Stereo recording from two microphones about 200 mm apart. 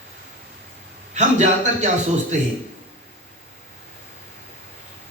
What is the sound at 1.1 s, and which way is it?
Speech, 35° right (ahead or behind).